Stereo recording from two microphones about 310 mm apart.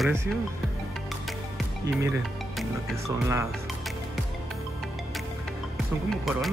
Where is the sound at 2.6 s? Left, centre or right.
Centre.